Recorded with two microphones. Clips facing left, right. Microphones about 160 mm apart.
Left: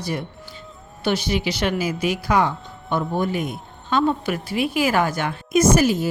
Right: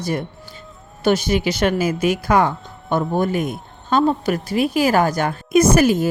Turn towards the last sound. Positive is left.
turn(degrees=-55)  # may be behind; listen again after turning